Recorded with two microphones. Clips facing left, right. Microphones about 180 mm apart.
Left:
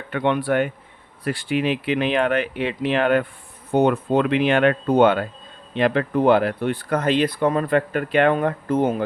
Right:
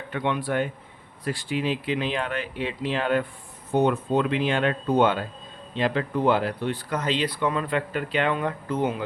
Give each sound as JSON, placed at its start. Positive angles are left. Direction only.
{"t": 0.1, "sound": "speech", "side_deg": 60}